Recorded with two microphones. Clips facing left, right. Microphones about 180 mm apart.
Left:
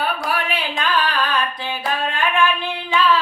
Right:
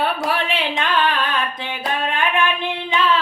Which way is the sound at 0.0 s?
25° right (ahead or behind).